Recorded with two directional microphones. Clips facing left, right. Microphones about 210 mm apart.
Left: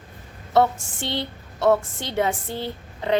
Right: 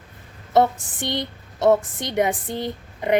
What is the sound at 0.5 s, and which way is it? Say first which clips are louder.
A woman's voice: right 1 dB; 15° right (ahead or behind).